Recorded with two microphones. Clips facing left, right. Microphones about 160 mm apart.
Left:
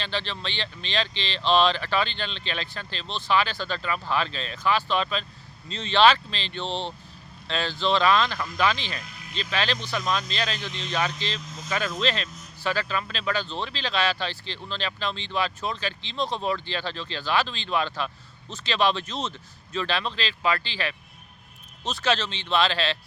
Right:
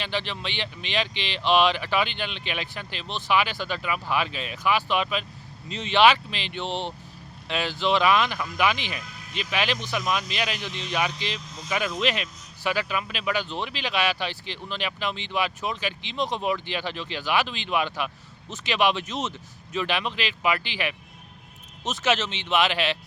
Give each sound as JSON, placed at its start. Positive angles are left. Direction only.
{"t": 0.0, "sound": "speech", "side_deg": -15}